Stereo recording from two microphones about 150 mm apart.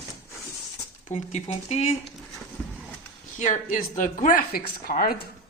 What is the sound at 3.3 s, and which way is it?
Speech, 55° left (ahead or behind).